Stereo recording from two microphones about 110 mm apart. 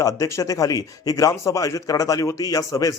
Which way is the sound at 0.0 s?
30° left (ahead or behind).